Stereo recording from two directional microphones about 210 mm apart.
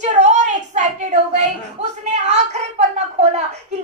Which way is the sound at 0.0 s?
35° right (ahead or behind).